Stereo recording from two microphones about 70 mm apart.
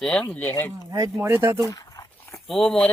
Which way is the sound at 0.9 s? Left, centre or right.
Right.